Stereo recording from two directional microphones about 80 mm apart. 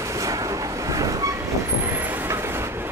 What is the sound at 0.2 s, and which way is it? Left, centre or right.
Vehicle, right.